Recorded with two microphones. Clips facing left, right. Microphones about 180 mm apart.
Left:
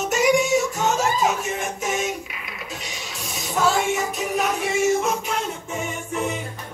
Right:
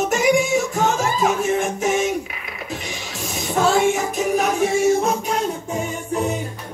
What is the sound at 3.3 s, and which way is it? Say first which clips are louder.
Music: right 3 dB; 50° right (ahead or behind).